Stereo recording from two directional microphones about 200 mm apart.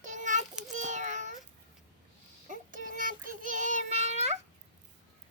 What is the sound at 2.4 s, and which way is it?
Child singing, 40° right (ahead or behind).